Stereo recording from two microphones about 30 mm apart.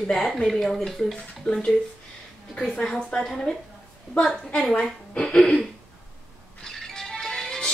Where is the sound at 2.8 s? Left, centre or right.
Left.